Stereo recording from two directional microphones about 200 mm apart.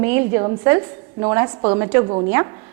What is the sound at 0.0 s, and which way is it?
A woman's voice, 10° right (ahead or behind).